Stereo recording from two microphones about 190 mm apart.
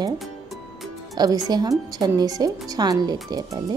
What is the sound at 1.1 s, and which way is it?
Speech, 20° right (ahead or behind).